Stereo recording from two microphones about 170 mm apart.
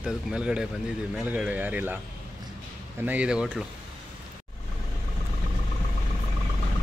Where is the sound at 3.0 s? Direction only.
10° right (ahead or behind).